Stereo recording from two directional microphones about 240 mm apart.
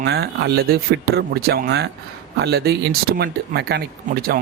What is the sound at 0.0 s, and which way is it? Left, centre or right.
Speech, right.